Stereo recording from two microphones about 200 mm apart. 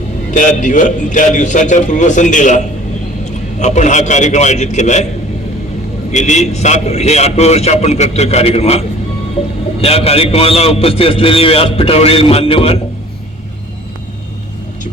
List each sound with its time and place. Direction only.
0.3 s a man's voice: 40° left (ahead or behind)
3.6 s a man's voice: 35° left (ahead or behind)
6.1 s a man's voice: 35° left (ahead or behind)
9.8 s a man's voice: 30° left (ahead or behind)